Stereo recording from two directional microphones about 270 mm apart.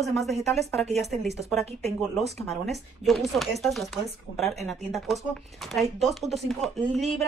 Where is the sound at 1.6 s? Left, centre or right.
Right.